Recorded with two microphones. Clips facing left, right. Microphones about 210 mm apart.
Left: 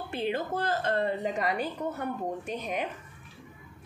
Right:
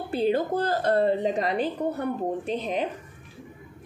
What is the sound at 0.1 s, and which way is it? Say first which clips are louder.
A woman's voice: right 7 dB; 35° right (ahead or behind).